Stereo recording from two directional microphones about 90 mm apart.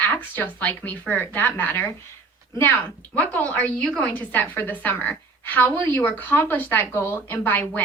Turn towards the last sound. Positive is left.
turn(degrees=20)  # may be behind; listen again after turning